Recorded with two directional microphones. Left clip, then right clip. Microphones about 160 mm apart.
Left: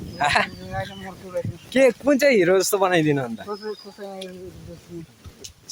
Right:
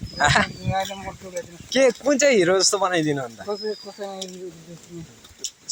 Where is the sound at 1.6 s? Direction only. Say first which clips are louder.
Left 1 dB; 20° left (ahead or behind).